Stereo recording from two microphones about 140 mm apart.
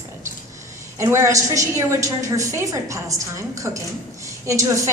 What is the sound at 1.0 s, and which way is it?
A woman's voice, 20° right (ahead or behind).